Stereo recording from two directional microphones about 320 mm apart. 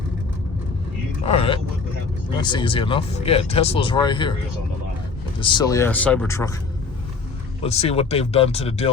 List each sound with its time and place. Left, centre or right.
1.2 s speech: centre
5.4 s speech: centre
7.6 s speech: centre